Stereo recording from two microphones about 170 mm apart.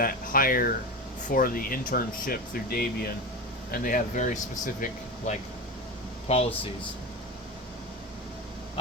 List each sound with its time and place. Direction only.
0.0 s speech: 60° left (ahead or behind); by 6.5 s 40° left (ahead or behind)